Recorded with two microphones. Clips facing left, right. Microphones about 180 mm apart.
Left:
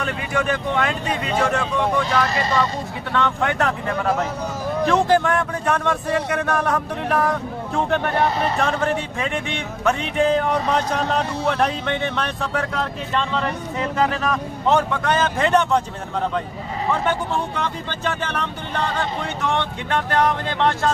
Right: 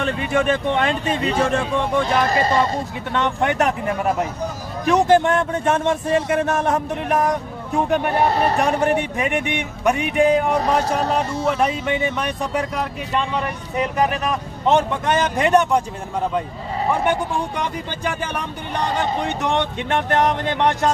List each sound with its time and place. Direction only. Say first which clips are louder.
0.0 s a man's voice: right 4 dB; 25° right (ahead or behind)
2.3 s speech: right 3 dB; 45° right (ahead or behind)
3.1 s a man's voice: right 1 dB; 20° right (ahead or behind)
8.3 s speech: right 3 dB; 65° right (ahead or behind)
8.5 s speech: right 3 dB; 15° right (ahead or behind)
16.9 s a man's voice: right 1 dB; 15° right (ahead or behind)